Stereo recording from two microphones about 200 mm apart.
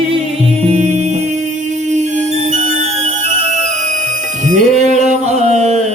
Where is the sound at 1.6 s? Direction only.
35° right (ahead or behind).